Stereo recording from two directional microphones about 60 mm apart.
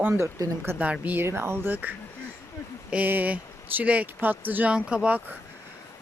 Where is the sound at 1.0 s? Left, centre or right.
Right.